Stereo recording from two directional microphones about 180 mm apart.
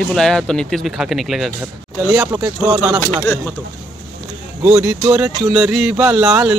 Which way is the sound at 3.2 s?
10° left (ahead or behind).